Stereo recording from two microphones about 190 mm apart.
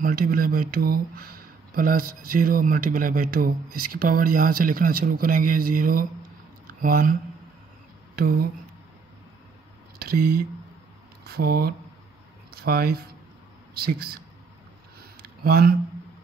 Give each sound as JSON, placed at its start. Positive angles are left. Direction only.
{"t": 0.0, "sound": "speech", "side_deg": -50}
{"t": 8.2, "sound": "speech", "side_deg": -55}
{"t": 9.9, "sound": "speech", "side_deg": -55}
{"t": 15.0, "sound": "a sound", "side_deg": -55}